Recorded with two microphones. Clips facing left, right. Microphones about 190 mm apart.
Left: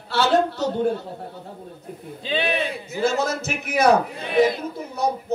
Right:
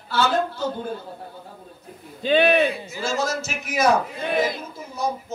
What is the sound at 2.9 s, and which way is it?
A man's voice, 60° left (ahead or behind).